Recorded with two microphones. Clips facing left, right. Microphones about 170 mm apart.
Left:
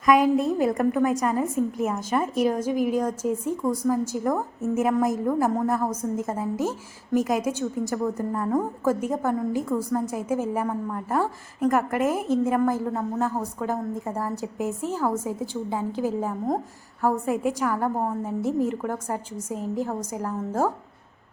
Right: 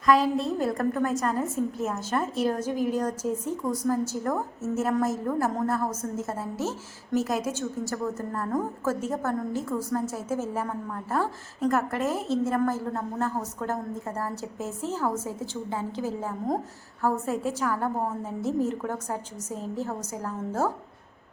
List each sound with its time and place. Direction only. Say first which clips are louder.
0.0 s a woman's voice: left 3 dB; 15° left (ahead or behind)